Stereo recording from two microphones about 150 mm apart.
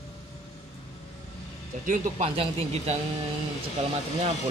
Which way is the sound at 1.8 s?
60° right (ahead or behind).